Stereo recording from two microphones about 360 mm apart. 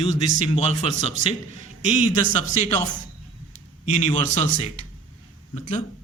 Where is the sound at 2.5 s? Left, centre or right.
Centre.